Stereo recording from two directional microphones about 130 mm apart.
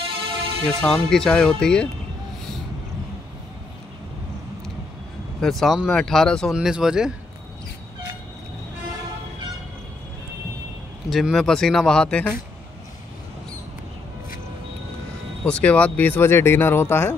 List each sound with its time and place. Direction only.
0.7 s speech: 5° left (ahead or behind)
5.4 s speech: centre (ahead or behind)
11.1 s speech: centre (ahead or behind)
15.4 s speech: 10° left (ahead or behind)